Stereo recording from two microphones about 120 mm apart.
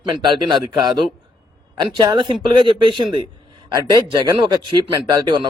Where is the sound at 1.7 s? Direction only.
40° right (ahead or behind).